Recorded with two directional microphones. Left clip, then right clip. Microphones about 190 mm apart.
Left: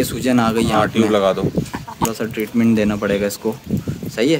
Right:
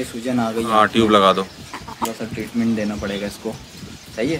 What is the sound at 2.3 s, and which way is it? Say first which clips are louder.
Speech: left 5 dB; 75° left (ahead or behind).